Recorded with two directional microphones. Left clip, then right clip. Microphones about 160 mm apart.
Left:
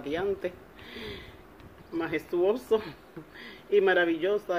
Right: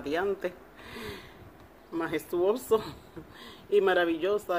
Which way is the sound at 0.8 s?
65° right (ahead or behind).